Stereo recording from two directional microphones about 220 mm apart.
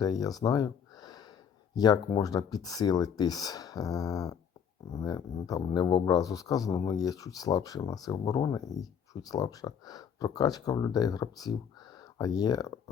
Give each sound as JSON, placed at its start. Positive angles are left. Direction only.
{"t": 0.0, "sound": "a man's voice", "side_deg": 15}